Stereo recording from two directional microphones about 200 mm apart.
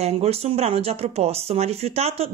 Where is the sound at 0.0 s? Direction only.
30° right (ahead or behind).